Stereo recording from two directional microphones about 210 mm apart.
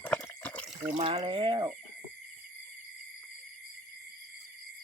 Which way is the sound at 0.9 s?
30° right (ahead or behind).